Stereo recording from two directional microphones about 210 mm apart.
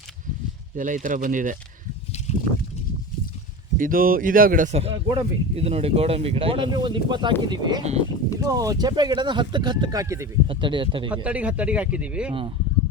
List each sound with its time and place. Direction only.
0.8 s speech: 40° right (ahead or behind)
2.3 s a sound: 30° left (ahead or behind)
3.8 s speech: 40° right (ahead or behind); by 11.1 s 25° right (ahead or behind)
11.1 s speech: 5° right (ahead or behind)
12.3 s speech: 25° right (ahead or behind)